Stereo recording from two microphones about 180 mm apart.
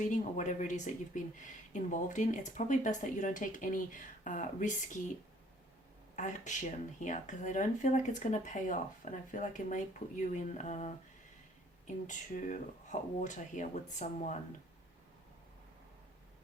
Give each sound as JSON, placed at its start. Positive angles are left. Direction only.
{"t": 0.0, "sound": "speech", "side_deg": 45}
{"t": 6.1, "sound": "speech", "side_deg": 40}